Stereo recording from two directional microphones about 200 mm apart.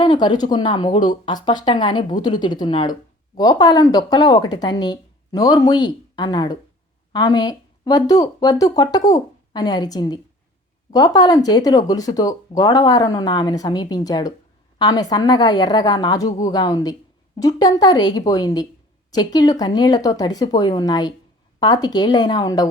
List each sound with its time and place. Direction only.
0.0 s a woman's voice: 20° left (ahead or behind)